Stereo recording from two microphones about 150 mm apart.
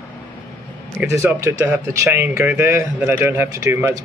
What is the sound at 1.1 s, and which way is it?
Speech, 20° right (ahead or behind).